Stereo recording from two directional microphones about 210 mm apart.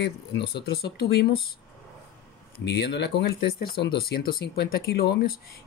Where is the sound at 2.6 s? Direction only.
55° left (ahead or behind).